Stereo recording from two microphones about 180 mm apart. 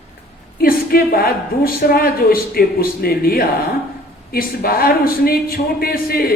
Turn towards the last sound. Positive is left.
turn(degrees=55)  # may be behind; listen again after turning